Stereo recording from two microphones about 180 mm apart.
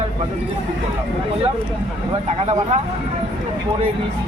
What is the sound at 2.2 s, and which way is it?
Speech, 40° right (ahead or behind).